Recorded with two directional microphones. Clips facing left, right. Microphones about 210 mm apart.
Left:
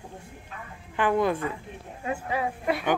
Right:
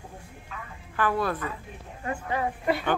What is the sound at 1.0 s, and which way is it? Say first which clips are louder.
Speech: left 3 dB; 20° left (ahead or behind).